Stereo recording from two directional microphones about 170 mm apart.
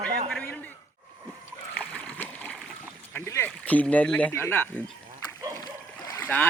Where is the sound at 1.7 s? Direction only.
5° left (ahead or behind).